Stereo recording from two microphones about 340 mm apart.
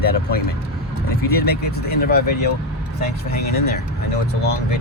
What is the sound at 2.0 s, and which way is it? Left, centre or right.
Speech, left.